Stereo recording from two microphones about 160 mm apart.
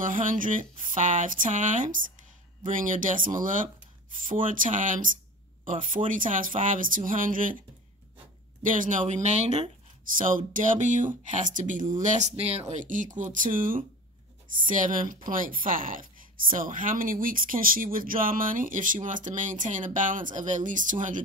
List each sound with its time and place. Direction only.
0.0 s a woman's voice: 55° right (ahead or behind)
8.6 s speech: 55° right (ahead or behind)
10.1 s a woman's voice: 60° right (ahead or behind)